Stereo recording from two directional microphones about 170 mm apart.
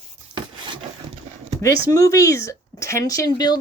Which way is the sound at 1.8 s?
20° left (ahead or behind).